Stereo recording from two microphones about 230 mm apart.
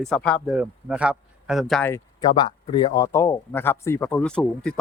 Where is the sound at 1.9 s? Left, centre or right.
Centre.